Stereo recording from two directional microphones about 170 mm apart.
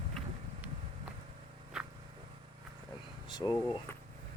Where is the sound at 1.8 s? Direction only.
5° right (ahead or behind).